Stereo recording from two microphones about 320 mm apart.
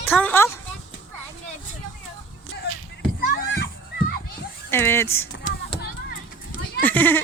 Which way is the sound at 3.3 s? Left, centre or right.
Left.